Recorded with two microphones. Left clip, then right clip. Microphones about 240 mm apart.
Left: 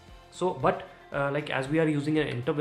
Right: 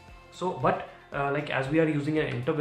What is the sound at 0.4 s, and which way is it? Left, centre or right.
Speech, left.